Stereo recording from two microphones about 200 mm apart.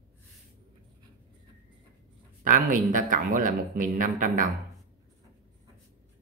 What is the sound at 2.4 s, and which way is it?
Speech, 40° right (ahead or behind).